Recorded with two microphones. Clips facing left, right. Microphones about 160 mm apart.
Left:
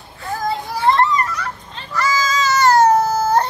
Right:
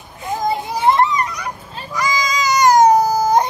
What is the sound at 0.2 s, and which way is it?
Children playing, 20° right (ahead or behind).